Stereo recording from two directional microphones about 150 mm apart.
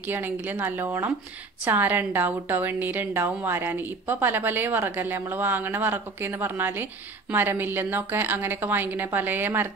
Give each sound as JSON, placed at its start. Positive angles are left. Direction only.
{"t": 0.1, "sound": "a woman's voice", "side_deg": -15}